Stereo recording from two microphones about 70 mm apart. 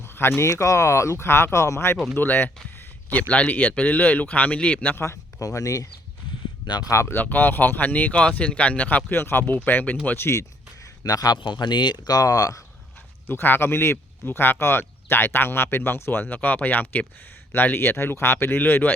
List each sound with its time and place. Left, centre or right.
0.0 s speech: left
0.5 s speech: left
2.1 s speech: left
5.0 s speech: left
6.7 s speech: left
7.1 s speech: left
10.1 s speech: left
11.0 s speech: left
13.2 s speech: left